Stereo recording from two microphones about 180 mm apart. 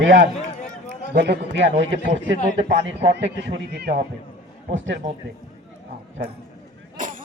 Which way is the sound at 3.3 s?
70° right (ahead or behind).